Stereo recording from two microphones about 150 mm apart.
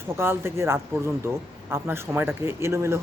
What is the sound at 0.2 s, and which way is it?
A man's voice, 15° right (ahead or behind).